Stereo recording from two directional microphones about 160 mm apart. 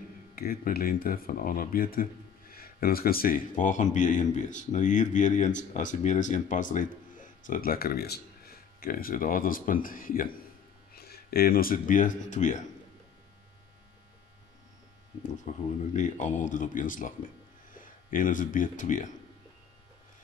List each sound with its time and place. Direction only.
0.4 s speech: 65° left (ahead or behind)
11.0 s speech: 75° left (ahead or behind); by 12.6 s 50° left (ahead or behind)
15.4 s speech: 50° left (ahead or behind)